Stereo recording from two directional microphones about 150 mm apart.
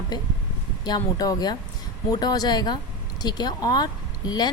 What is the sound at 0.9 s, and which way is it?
A woman's voice, 25° left (ahead or behind).